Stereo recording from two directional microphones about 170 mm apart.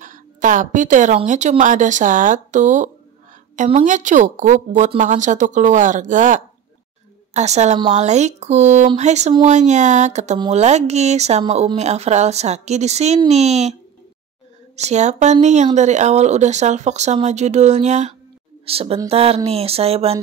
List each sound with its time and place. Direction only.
0.0 s speech: 50° right (ahead or behind)
14.8 s speech: 40° right (ahead or behind)